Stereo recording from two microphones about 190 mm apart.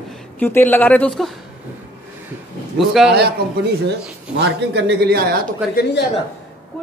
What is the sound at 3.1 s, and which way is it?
Speech, 60° right (ahead or behind).